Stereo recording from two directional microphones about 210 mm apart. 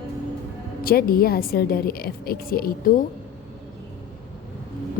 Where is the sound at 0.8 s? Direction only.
45° left (ahead or behind).